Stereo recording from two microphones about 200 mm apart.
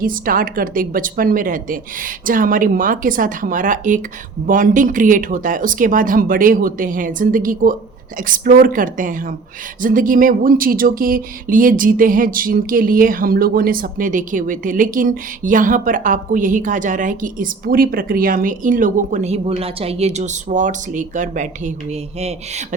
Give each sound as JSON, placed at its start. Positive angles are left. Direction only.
{"t": 0.0, "sound": "a woman's voice", "side_deg": -45}